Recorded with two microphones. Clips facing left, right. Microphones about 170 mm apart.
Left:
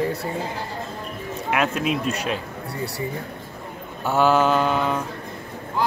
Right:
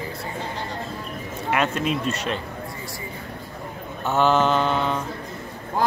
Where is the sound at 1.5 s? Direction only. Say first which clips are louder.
Even; 5° left (ahead or behind).